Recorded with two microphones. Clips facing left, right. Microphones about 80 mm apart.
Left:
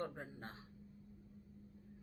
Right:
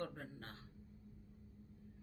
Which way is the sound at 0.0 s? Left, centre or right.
Centre.